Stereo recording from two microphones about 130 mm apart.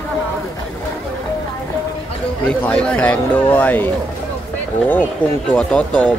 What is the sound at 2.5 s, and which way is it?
A man's voice, 5° left (ahead or behind).